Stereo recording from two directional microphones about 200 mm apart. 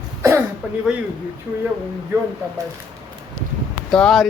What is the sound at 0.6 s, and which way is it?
Speech, 10° right (ahead or behind).